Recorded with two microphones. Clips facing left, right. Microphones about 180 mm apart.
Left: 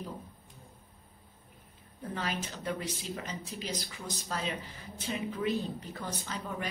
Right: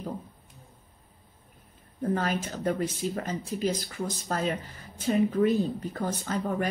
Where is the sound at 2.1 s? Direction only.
50° right (ahead or behind).